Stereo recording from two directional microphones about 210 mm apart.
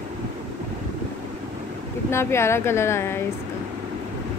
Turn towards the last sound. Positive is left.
turn(degrees=10)  # may be behind; listen again after turning